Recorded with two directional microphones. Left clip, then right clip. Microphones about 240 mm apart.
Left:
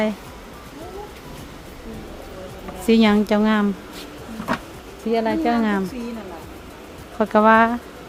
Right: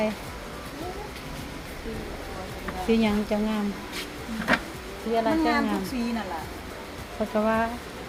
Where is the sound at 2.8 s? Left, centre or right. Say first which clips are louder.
Left 8 dB; left.